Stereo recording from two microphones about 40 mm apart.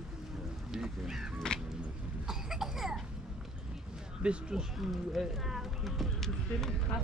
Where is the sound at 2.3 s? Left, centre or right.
Centre.